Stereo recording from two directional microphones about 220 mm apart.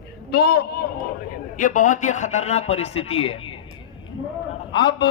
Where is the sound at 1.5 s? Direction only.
35° left (ahead or behind).